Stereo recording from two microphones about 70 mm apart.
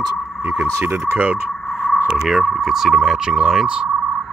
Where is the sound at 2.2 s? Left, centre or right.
Centre.